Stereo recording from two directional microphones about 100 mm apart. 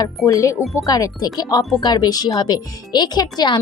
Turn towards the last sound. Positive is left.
turn(degrees=45)  # may be behind; listen again after turning